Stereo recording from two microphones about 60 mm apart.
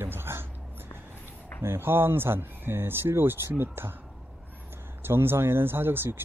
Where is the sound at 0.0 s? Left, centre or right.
Right.